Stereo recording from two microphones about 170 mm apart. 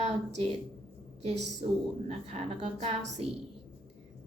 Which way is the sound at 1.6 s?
45° right (ahead or behind).